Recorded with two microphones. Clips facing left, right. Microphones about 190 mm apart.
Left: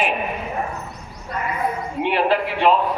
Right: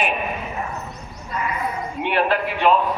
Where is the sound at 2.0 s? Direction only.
30° left (ahead or behind).